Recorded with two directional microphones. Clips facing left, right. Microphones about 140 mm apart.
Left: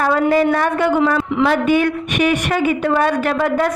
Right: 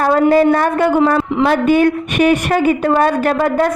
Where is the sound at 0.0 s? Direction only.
40° right (ahead or behind).